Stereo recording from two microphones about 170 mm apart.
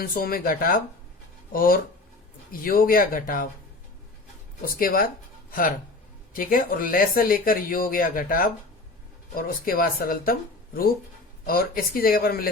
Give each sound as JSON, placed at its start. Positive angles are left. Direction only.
{"t": 0.0, "sound": "speech", "side_deg": 60}
{"t": 4.6, "sound": "speech", "side_deg": 55}
{"t": 11.4, "sound": "speech", "side_deg": 60}